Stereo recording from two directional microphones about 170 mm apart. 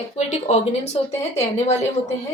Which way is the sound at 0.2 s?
40° left (ahead or behind).